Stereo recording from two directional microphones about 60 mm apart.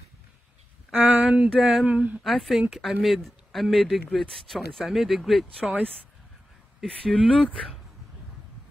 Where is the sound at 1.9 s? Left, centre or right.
Right.